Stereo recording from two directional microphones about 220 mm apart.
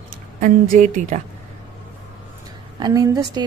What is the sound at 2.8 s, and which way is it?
Speech, 15° right (ahead or behind).